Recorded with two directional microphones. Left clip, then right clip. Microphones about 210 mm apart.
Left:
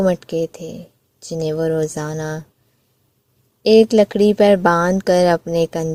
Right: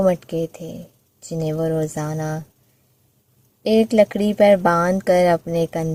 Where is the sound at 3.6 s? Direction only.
45° left (ahead or behind).